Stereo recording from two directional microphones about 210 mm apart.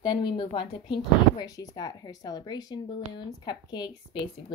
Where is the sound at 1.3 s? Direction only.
15° left (ahead or behind).